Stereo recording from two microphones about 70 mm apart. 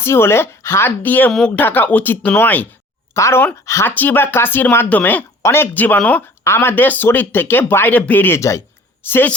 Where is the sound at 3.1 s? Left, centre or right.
Left.